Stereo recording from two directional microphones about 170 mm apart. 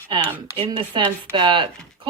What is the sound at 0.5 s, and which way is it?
Speech, 30° right (ahead or behind).